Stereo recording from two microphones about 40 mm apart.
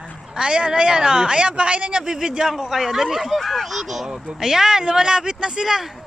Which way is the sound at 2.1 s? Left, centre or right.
Centre.